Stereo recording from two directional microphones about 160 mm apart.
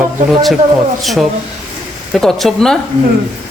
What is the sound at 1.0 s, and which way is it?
Speech, centre (ahead or behind).